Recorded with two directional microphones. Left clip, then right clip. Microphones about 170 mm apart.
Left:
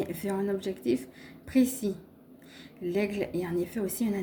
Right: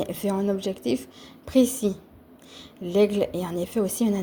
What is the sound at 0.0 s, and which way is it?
A woman's voice, 30° right (ahead or behind).